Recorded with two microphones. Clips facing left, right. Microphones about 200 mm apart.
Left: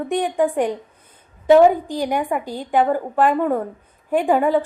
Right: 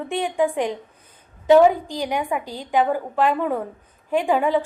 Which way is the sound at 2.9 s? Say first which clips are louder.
Left 3 dB; 50° left (ahead or behind).